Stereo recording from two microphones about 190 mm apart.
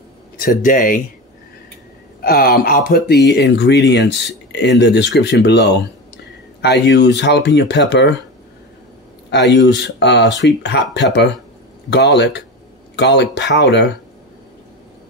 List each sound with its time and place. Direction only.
0.4 s speech: 45° left (ahead or behind)
2.2 s speech: 50° left (ahead or behind); by 8.2 s 65° left (ahead or behind)
9.3 s speech: 65° left (ahead or behind)